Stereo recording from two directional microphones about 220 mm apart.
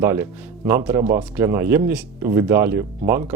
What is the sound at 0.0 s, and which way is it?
Speech, 10° right (ahead or behind).